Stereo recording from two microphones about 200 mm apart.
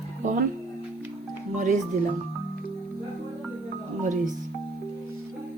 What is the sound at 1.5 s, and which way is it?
Speech, 40° right (ahead or behind).